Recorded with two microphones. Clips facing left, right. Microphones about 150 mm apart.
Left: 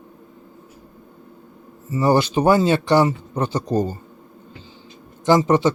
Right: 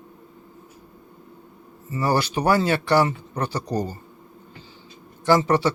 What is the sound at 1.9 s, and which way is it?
Speech, 20° left (ahead or behind).